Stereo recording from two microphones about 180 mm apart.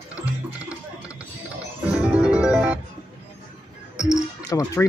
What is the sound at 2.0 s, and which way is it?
Music, 5° right (ahead or behind).